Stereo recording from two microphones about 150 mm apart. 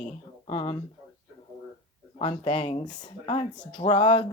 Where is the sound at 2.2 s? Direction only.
35° left (ahead or behind).